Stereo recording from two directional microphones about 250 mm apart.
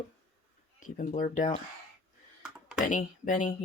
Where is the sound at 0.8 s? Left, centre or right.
Left.